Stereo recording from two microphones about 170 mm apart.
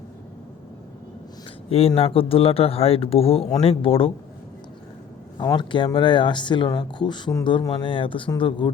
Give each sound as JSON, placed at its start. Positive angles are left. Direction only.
{"t": 2.0, "sound": "speech", "side_deg": 35}
{"t": 5.4, "sound": "speech", "side_deg": 25}